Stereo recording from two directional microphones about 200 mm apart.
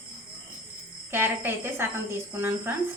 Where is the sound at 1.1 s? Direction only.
10° right (ahead or behind).